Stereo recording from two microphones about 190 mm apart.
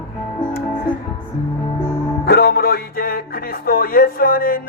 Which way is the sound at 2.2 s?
55° left (ahead or behind).